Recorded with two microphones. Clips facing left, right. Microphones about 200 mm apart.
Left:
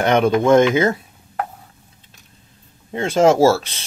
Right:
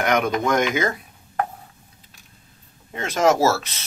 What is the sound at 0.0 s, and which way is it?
Speech, 30° left (ahead or behind).